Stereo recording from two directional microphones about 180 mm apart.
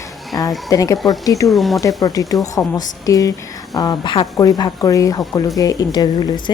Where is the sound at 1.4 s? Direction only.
Centre (ahead or behind).